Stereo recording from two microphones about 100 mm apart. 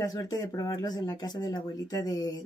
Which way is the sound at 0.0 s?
40° left (ahead or behind).